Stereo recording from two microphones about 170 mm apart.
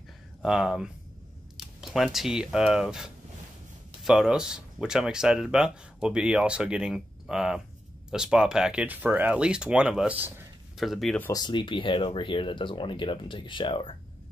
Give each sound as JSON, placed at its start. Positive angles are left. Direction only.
{"t": 0.4, "sound": "speech", "side_deg": -5}
{"t": 11.1, "sound": "speech", "side_deg": 15}
{"t": 11.4, "sound": "speech", "side_deg": 30}